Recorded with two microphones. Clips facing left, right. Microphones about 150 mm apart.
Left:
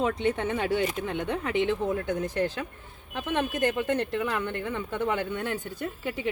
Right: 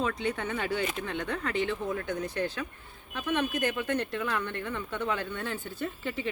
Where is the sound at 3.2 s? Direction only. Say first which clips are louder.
Left 2 dB; 20° left (ahead or behind).